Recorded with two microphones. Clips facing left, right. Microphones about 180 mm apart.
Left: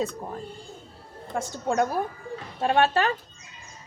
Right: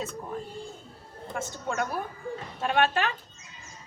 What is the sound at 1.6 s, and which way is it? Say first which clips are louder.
A woman's voice: left 7 dB; 40° left (ahead or behind).